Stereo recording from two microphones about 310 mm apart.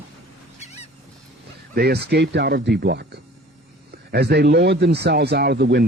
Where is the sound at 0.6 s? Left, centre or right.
Left.